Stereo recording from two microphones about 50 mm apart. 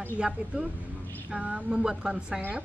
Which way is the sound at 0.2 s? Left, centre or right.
Right.